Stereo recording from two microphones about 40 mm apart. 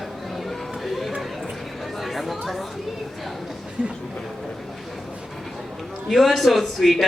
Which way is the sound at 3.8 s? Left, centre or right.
Right.